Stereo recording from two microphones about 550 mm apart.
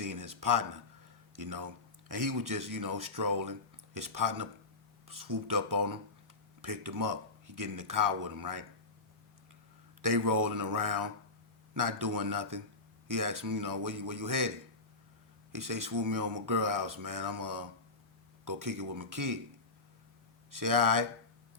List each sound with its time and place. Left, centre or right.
0.0 s a sound: right
1.4 s speech: right
10.0 s speech: right
15.5 s speech: right
20.5 s speech: right